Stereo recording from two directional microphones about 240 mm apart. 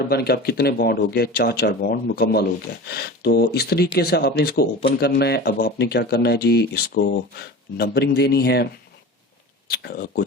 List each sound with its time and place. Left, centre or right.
0.1 s speech: left
9.6 s speech: left